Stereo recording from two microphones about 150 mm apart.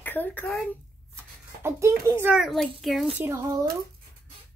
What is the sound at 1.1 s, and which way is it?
Writing, 15° right (ahead or behind).